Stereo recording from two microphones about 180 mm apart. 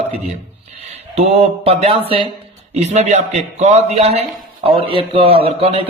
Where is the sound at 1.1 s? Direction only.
35° right (ahead or behind).